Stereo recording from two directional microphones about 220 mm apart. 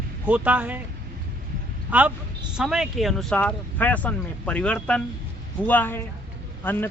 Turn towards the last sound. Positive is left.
turn(degrees=10)  # may be behind; listen again after turning